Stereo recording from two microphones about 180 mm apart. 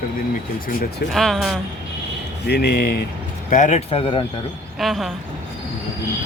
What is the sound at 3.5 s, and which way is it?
Speech, 40° left (ahead or behind).